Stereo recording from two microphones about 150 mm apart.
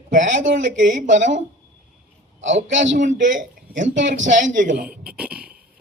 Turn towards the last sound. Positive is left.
turn(degrees=-10)  # may be behind; listen again after turning